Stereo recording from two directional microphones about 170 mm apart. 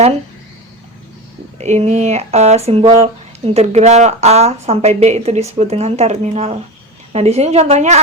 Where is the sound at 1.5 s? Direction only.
40° right (ahead or behind).